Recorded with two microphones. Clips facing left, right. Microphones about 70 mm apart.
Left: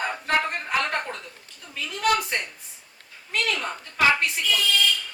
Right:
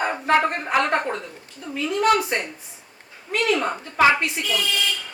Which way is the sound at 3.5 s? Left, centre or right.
Right.